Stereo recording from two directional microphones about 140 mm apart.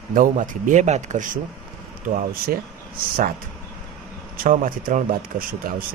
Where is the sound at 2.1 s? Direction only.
90° right.